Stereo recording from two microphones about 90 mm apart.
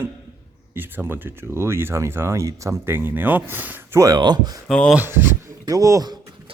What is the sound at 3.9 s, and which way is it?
Speech, 40° right (ahead or behind).